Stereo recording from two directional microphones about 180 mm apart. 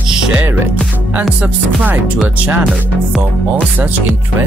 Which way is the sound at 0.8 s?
5° right (ahead or behind).